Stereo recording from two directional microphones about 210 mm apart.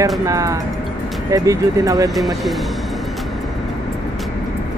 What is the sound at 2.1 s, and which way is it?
Speech, centre (ahead or behind).